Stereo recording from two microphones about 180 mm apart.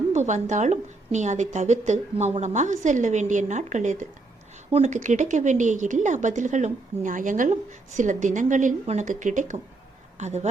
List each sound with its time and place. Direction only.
0.1 s a woman's voice: 40° right (ahead or behind)